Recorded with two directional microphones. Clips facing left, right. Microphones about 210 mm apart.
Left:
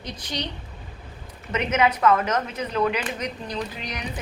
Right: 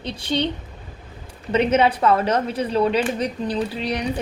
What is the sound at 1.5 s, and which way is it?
A woman's voice, 30° right (ahead or behind).